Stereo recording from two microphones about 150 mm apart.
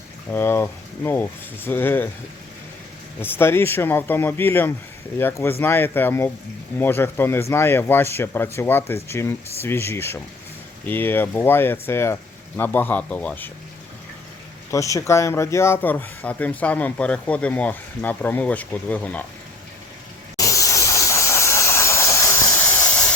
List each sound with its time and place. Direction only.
0.3 s speech: 15° left (ahead or behind)
3.2 s speech: 15° left (ahead or behind)
14.7 s speech: 20° left (ahead or behind)
20.3 s hiss: 20° left (ahead or behind)